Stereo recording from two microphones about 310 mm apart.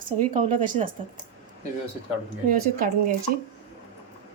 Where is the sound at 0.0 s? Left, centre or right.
Right.